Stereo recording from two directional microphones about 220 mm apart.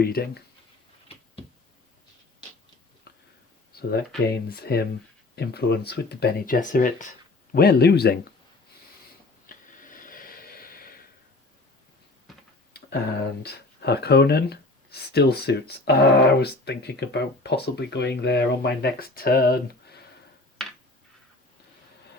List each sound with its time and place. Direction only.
0.0 s speech: 45° left (ahead or behind)
3.1 s a sound: 45° left (ahead or behind)
4.3 s speech: 45° left (ahead or behind)
9.5 s snort: 40° left (ahead or behind)
12.3 s tick-tock: centre (ahead or behind)
13.4 s speech: 50° left (ahead or behind)
20.6 s a sound: centre (ahead or behind)